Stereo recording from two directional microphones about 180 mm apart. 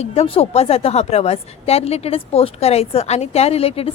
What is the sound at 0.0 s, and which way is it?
A woman's voice, 35° left (ahead or behind).